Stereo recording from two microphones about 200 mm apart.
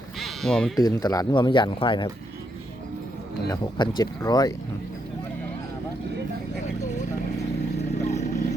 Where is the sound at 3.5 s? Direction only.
20° left (ahead or behind).